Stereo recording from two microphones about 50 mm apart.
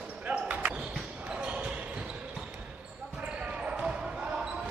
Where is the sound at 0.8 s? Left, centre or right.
Centre.